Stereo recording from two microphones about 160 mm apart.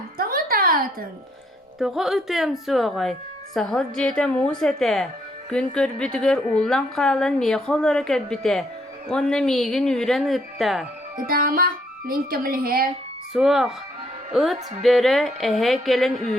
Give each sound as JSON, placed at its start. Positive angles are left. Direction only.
{"t": 0.2, "sound": "music", "side_deg": -65}
{"t": 1.8, "sound": "a woman's voice", "side_deg": 0}
{"t": 11.3, "sound": "speech", "side_deg": -65}
{"t": 13.3, "sound": "a woman's voice", "side_deg": -5}